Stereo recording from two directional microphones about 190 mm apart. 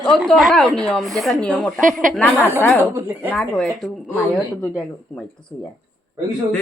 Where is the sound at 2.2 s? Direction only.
5° left (ahead or behind).